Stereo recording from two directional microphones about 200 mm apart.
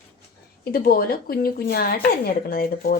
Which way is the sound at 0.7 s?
50° left (ahead or behind).